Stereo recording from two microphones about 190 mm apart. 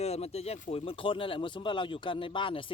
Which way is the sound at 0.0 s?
35° left (ahead or behind).